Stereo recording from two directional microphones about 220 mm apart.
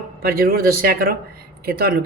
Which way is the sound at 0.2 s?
45° right (ahead or behind).